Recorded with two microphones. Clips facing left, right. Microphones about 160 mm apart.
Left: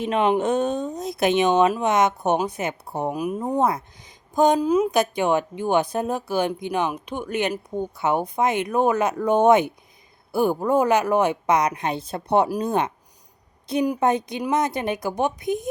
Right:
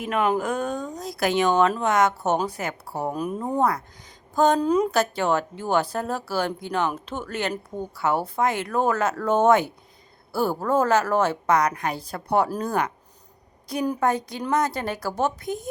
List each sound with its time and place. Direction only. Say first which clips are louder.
0.0 s speech: left 3 dB; 25° left (ahead or behind)
3.2 s speech: left 1 dB; 10° left (ahead or behind)
4.6 s speech: left 1 dB; 5° left (ahead or behind)